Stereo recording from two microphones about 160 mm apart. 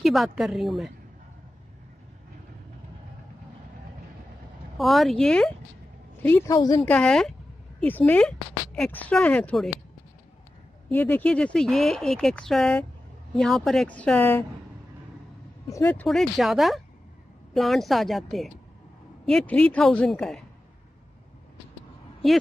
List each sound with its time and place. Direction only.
0.0 s speech: centre (ahead or behind)
4.7 s speech: centre (ahead or behind)
6.5 s a woman's voice: 25° left (ahead or behind)
6.8 s speech: 5° left (ahead or behind)
10.9 s speech: 10° left (ahead or behind)
15.7 s speech: 10° left (ahead or behind)
16.1 s speech: centre (ahead or behind)